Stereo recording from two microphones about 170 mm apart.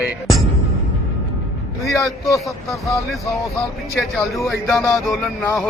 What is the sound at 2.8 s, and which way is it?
Speech, 20° left (ahead or behind).